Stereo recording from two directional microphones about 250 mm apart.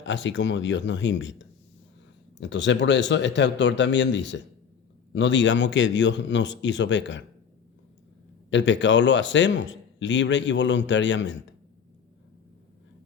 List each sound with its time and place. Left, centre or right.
0.0 s a man's voice: left
8.4 s a man's voice: left